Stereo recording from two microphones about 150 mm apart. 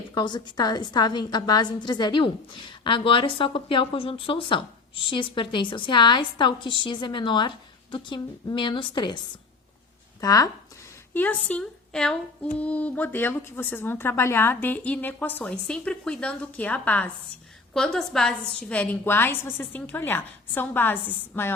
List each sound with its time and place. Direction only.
0.1 s a woman's voice: 30° left (ahead or behind)
10.2 s speech: 25° left (ahead or behind)
11.1 s a woman's voice: 10° left (ahead or behind)